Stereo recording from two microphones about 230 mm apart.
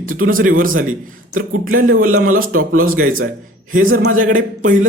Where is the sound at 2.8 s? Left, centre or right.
Right.